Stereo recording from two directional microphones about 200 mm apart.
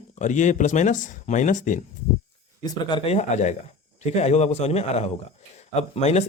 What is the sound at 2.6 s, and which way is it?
A man's voice, 25° left (ahead or behind).